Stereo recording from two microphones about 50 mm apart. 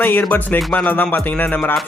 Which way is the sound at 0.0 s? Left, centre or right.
Left.